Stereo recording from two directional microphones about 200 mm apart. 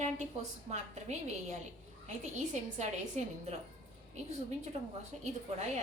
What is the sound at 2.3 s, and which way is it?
A woman's voice, 35° right (ahead or behind).